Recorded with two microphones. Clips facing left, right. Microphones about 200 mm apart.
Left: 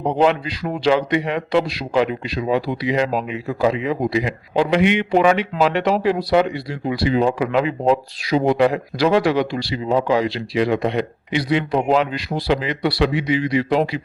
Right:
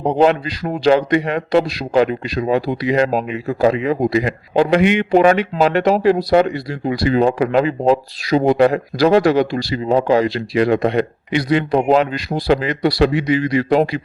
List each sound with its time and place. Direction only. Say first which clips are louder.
0.2 s a man's voice: right 3 dB; 40° right (ahead or behind)